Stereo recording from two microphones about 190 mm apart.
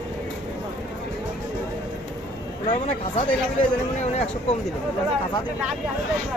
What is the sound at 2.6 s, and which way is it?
Speech, 35° left (ahead or behind).